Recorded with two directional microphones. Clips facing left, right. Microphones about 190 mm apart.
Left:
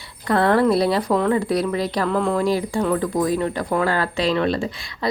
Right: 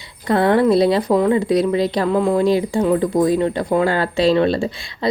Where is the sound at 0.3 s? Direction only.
20° right (ahead or behind).